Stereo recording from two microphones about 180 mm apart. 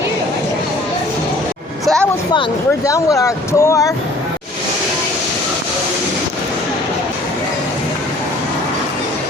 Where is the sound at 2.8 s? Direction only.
20° left (ahead or behind).